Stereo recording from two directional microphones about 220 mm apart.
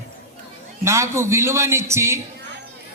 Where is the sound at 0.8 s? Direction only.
15° right (ahead or behind).